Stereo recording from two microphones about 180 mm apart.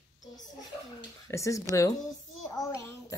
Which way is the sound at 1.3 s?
15° left (ahead or behind).